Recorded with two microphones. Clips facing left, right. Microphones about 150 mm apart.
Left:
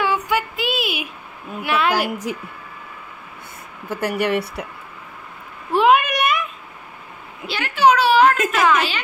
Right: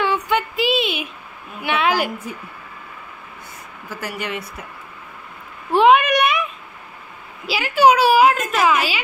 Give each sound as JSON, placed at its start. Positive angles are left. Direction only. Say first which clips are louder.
{"t": 0.0, "sound": "child singing", "louder": "right 1 dB", "side_deg": 10}
{"t": 1.6, "sound": "a sound", "louder": "even", "side_deg": 0}
{"t": 2.3, "sound": "a woman's voice", "louder": "left 5 dB", "side_deg": 90}
{"t": 4.0, "sound": "speech", "louder": "left 8 dB", "side_deg": 60}
{"t": 5.7, "sound": "a sound", "louder": "right 2 dB", "side_deg": 0}
{"t": 7.4, "sound": "a child's voice", "louder": "right 2 dB", "side_deg": -5}